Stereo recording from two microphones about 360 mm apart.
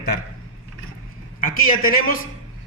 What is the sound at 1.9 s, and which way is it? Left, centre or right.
Speech, left.